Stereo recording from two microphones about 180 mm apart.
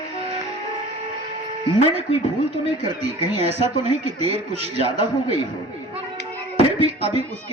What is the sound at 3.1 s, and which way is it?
Speech, 35° right (ahead or behind).